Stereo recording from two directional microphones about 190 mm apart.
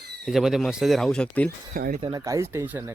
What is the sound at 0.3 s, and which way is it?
Speech, centre (ahead or behind).